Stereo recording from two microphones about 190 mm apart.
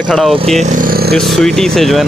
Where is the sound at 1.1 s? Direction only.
Centre (ahead or behind).